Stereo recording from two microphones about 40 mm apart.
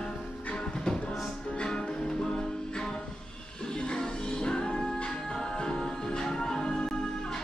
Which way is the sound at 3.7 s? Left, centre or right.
Left.